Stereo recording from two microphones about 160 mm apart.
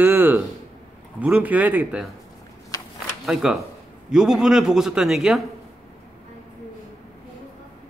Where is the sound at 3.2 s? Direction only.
5° right (ahead or behind).